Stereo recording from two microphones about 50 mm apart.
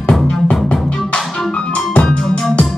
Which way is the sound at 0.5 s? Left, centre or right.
Centre.